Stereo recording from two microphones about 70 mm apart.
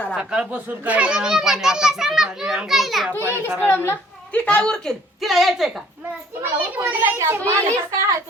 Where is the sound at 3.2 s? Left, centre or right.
Right.